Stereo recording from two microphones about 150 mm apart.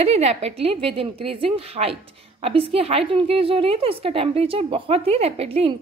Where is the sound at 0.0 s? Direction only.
45° right (ahead or behind).